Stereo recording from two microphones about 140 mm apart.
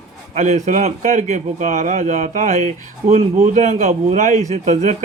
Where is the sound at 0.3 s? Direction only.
55° right (ahead or behind).